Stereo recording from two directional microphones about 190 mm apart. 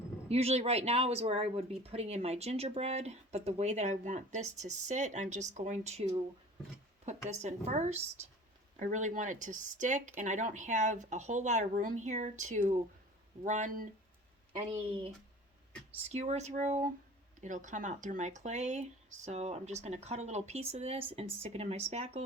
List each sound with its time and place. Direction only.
0.3 s speech: 35° right (ahead or behind)
14.5 s speech: 25° right (ahead or behind)